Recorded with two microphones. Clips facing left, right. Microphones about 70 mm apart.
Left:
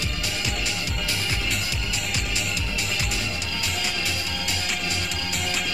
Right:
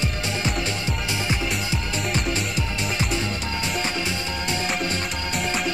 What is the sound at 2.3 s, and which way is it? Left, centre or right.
Music, right.